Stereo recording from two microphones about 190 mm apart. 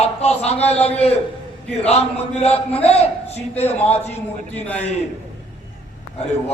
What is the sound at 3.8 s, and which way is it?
A man's voice, 10° left (ahead or behind).